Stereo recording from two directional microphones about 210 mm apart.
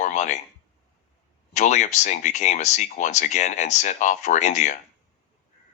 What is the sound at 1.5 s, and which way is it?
Speech, 35° left (ahead or behind).